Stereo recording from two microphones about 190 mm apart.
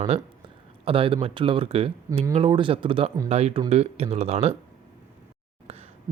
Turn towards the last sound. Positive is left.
turn(degrees=-30)  # may be behind; listen again after turning